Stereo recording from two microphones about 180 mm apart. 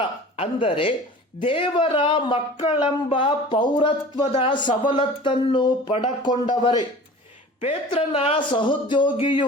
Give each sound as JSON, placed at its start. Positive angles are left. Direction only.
{"t": 0.0, "sound": "speech", "side_deg": 30}
{"t": 7.6, "sound": "speech", "side_deg": 30}